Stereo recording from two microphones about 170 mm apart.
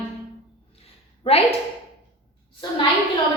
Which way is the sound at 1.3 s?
35° left (ahead or behind).